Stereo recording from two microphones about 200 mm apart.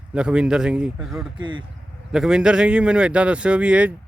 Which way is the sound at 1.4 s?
25° right (ahead or behind).